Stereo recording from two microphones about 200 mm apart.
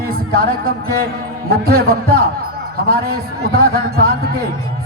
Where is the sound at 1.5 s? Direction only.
50° right (ahead or behind).